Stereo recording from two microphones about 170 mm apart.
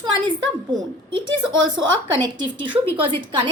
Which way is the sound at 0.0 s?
25° right (ahead or behind).